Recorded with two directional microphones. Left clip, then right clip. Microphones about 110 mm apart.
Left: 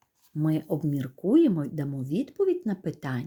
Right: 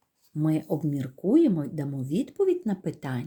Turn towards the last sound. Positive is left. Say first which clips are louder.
# even
turn(degrees=35)  # may be behind; listen again after turning